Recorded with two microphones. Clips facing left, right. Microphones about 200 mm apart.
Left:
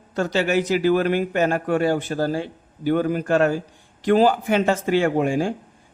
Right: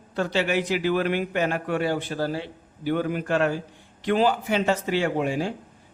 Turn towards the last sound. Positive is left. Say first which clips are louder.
# left 4 dB
turn(degrees=50)  # may be behind; listen again after turning